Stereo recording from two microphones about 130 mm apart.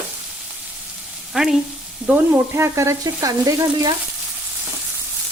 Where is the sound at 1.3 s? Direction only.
5° right (ahead or behind); by 3.9 s 25° right (ahead or behind).